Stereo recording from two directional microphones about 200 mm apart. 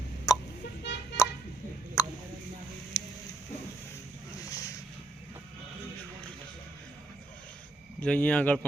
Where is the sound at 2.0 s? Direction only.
15° left (ahead or behind).